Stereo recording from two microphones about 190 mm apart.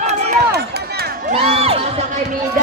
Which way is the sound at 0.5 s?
55° right (ahead or behind).